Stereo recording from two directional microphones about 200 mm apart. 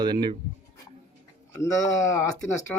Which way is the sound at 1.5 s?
15° left (ahead or behind).